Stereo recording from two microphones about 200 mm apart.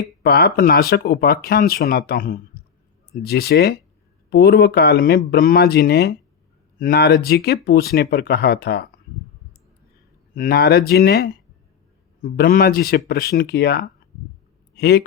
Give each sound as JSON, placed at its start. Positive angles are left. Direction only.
{"t": 0.2, "sound": "speech", "side_deg": 50}
{"t": 10.3, "sound": "speech", "side_deg": 50}